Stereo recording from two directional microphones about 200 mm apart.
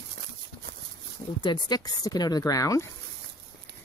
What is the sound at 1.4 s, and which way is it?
Speech, 20° left (ahead or behind).